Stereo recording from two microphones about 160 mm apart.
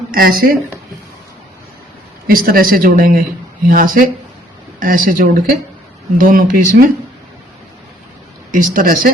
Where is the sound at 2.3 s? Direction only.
65° right (ahead or behind).